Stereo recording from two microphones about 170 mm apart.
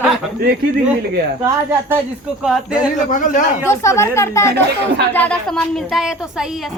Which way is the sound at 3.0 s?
50° left (ahead or behind).